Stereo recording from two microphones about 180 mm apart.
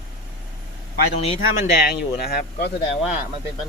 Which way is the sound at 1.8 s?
60° left (ahead or behind).